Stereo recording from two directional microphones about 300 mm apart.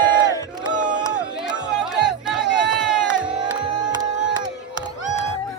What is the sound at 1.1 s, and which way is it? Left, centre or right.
Music, centre.